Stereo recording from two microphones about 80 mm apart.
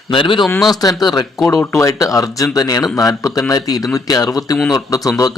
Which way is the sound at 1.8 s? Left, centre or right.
Left.